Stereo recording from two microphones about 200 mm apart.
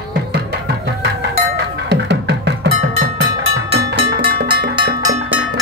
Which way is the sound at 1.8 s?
60° right (ahead or behind).